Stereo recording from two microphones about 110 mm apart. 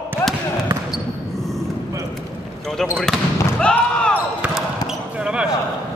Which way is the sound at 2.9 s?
5° left (ahead or behind).